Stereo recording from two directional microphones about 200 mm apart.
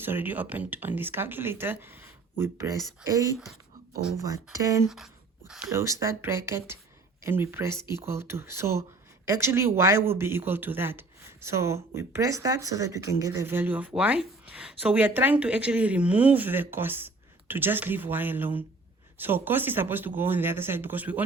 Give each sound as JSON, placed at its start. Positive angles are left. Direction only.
{"t": 0.0, "sound": "speech", "side_deg": -10}
{"t": 5.5, "sound": "speech", "side_deg": -10}